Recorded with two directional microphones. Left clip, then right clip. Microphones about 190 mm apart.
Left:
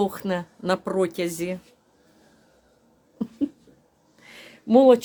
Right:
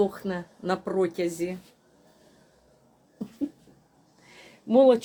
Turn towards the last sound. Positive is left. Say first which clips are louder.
# left 3 dB
turn(degrees=20)  # may be behind; listen again after turning